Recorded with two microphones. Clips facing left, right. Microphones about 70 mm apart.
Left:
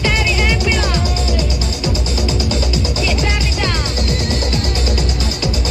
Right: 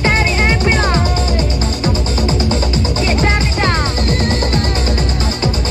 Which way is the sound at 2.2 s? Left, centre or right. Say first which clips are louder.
Right 3 dB; right.